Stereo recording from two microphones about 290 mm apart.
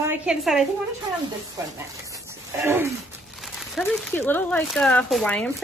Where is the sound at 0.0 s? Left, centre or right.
Centre.